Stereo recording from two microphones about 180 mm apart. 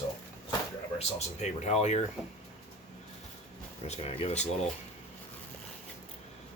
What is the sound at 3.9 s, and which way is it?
Speech, 35° left (ahead or behind).